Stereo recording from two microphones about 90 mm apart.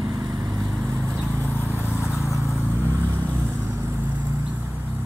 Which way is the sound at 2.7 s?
25° right (ahead or behind).